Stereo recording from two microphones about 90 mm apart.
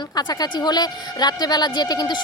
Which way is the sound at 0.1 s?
50° left (ahead or behind).